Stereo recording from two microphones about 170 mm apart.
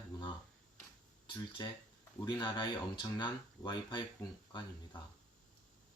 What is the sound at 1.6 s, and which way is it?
Speech, 20° left (ahead or behind).